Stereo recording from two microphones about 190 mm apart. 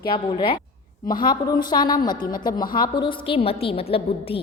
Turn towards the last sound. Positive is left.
turn(degrees=30)  # may be behind; listen again after turning